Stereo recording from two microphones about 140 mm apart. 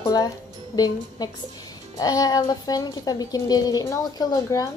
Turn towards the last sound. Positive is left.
turn(degrees=25)  # may be behind; listen again after turning